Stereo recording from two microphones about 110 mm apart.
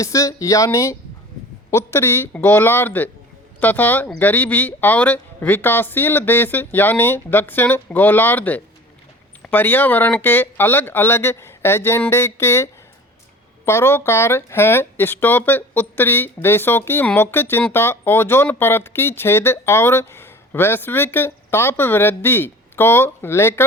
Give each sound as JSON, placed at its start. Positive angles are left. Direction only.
{"t": 0.0, "sound": "speech", "side_deg": 30}